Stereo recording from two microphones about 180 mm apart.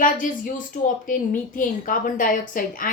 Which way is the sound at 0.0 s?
45° left (ahead or behind).